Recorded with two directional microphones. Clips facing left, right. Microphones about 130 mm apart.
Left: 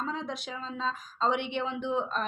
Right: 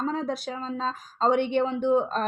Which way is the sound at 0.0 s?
40° right (ahead or behind).